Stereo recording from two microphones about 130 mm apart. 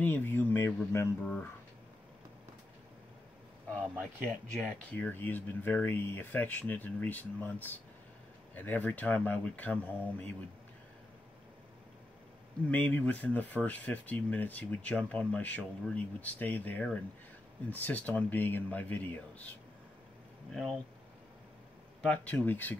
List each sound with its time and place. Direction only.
0.0 s speech: 15° left (ahead or behind)
4.0 s speech: 10° left (ahead or behind)
12.6 s speech: 10° left (ahead or behind)
20.5 s speech: 5° left (ahead or behind)
22.0 s speech: 10° left (ahead or behind)